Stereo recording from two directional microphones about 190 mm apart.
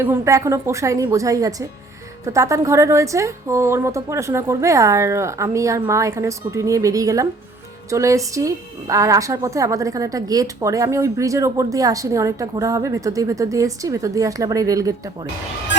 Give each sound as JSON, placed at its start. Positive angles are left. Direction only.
{"t": 0.0, "sound": "a woman's voice", "side_deg": -15}